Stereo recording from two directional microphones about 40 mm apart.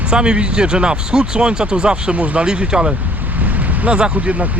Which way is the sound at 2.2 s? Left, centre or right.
Right.